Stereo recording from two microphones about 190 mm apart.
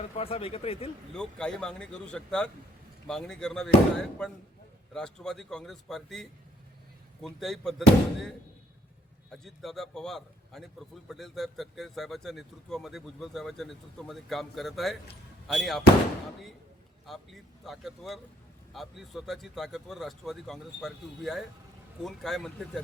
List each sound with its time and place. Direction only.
0.2 s speech: 30° left (ahead or behind)
1.1 s a man's voice: 5° left (ahead or behind)
4.9 s a man's voice: 5° left (ahead or behind)
9.3 s a man's voice: centre (ahead or behind)
17.1 s a man's voice: centre (ahead or behind)